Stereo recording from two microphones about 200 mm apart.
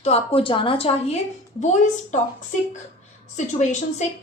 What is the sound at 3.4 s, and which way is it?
Speech, 35° left (ahead or behind).